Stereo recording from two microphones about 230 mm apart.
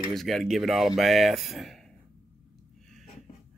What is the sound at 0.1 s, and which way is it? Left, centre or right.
Speech, centre.